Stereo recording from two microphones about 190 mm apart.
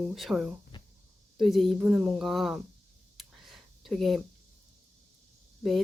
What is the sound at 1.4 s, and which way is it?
Speech, centre (ahead or behind).